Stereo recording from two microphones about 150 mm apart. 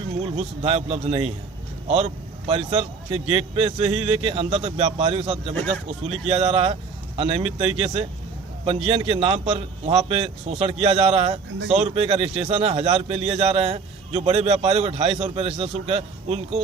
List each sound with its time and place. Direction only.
0.2 s a man's voice: 45° right (ahead or behind)